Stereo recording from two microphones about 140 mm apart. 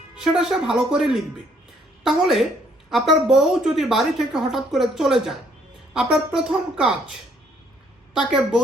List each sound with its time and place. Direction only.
0.2 s speech: centre (ahead or behind)